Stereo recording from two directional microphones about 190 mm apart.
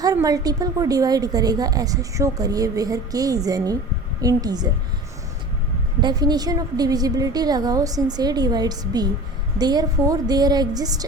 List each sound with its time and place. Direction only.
0.0 s a woman's voice: 20° right (ahead or behind)
6.0 s a woman's voice: 20° right (ahead or behind)